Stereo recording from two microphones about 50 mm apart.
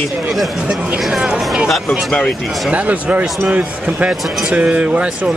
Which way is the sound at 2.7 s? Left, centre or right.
Right.